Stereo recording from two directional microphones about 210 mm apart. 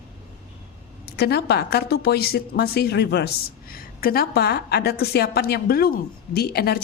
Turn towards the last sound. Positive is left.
turn(degrees=50)  # may be behind; listen again after turning